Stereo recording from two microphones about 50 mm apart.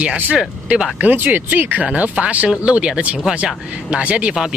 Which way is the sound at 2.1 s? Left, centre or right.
Right.